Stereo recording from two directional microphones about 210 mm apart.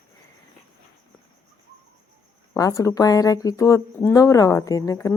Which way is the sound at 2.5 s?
15° left (ahead or behind).